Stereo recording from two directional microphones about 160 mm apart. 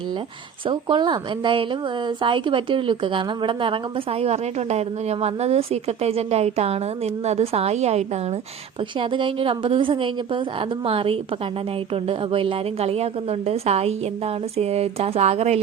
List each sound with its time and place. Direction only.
0.7 s a woman's voice: 30° right (ahead or behind)
9.0 s speech: 30° right (ahead or behind)